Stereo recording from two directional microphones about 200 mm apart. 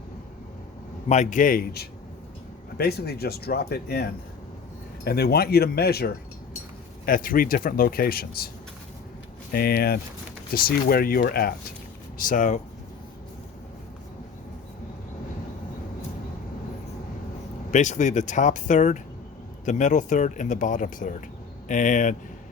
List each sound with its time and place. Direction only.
1.0 s speech: 35° left (ahead or behind)
9.5 s speech: 50° left (ahead or behind)
17.7 s speech: 40° left (ahead or behind)